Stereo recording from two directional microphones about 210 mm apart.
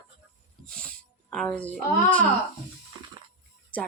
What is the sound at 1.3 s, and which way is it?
Speech, centre (ahead or behind).